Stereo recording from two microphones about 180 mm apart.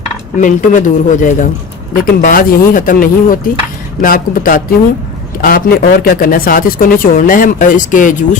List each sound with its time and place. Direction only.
0.3 s speech: 45° left (ahead or behind)